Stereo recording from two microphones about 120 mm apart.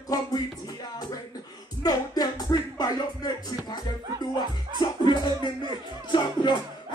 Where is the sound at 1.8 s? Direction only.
35° left (ahead or behind).